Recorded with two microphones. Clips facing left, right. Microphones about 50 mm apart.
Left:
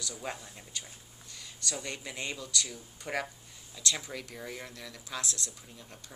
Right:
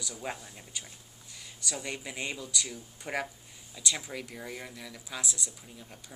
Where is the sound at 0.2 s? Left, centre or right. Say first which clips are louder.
Right 3 dB; centre.